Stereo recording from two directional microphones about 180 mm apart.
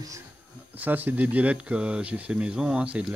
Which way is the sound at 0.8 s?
10° right (ahead or behind).